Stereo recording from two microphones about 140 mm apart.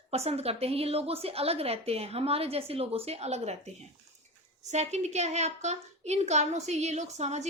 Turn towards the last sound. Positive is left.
turn(degrees=-55)  # may be behind; listen again after turning